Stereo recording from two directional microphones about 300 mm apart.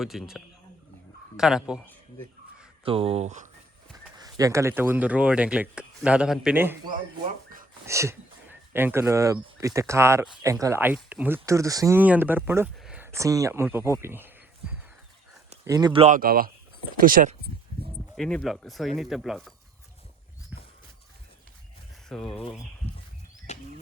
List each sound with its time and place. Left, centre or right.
0.0 s speech: centre
2.8 s speech: centre
3.9 s horse: centre
4.4 s speech: centre
15.6 s speech: centre; by 17.5 s right
18.2 s speech: centre
22.1 s speech: centre
23.5 s a sound: left